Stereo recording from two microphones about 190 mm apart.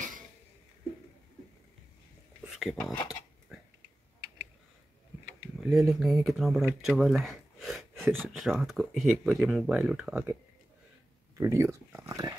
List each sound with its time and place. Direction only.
2.4 s speech: centre (ahead or behind)
5.6 s speech: centre (ahead or behind)
11.3 s speech: 15° right (ahead or behind)